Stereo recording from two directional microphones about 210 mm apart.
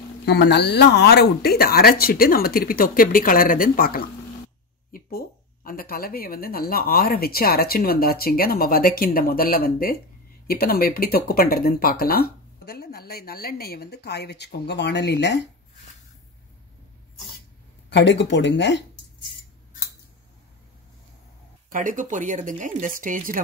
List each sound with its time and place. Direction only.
0.2 s speech: 55° left (ahead or behind)
17.8 s speech: 55° left (ahead or behind)
21.6 s speech: 40° right (ahead or behind)